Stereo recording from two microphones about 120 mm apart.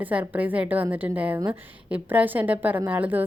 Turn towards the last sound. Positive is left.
turn(degrees=-15)  # may be behind; listen again after turning